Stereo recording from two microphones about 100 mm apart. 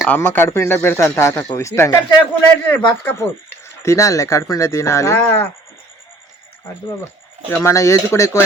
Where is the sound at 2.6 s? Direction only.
20° left (ahead or behind).